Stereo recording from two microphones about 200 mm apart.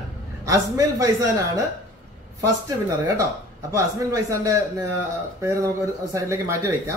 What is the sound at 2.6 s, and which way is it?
A woman's voice, 15° right (ahead or behind).